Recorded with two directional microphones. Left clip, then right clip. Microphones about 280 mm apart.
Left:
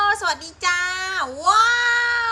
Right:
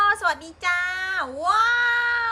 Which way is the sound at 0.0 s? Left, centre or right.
Centre.